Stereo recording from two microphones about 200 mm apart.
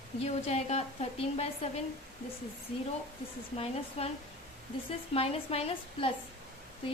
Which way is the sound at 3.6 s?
30° left (ahead or behind).